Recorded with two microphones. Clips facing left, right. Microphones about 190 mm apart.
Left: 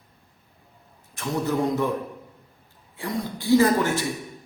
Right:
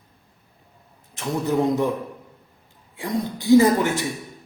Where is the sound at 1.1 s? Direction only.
20° right (ahead or behind).